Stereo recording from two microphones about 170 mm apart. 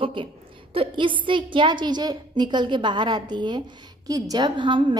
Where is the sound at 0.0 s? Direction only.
30° right (ahead or behind).